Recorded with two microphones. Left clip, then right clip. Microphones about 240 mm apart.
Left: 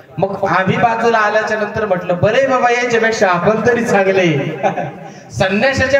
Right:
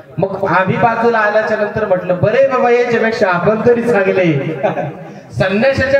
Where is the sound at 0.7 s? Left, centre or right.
Centre.